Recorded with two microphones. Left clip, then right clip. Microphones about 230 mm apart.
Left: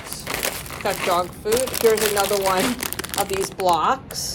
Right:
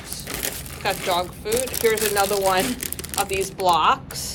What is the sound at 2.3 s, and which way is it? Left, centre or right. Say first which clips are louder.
Speech: even; left.